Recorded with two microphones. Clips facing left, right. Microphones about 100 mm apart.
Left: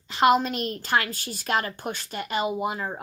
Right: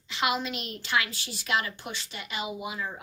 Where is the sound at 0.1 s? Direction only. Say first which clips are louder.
Left 9 dB; 45° left (ahead or behind).